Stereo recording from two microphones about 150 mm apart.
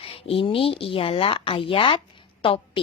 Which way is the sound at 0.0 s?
40° left (ahead or behind).